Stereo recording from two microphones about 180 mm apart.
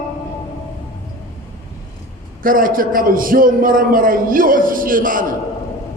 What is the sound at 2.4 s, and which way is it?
A man's voice, 50° right (ahead or behind).